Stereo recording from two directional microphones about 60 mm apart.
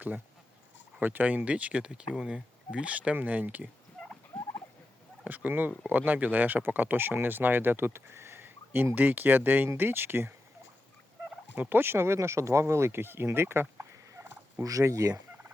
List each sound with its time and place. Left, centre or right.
0.9 s speech: right
4.3 s fowl: centre
5.2 s speech: right
7.9 s speech: right
11.5 s speech: right
14.6 s speech: right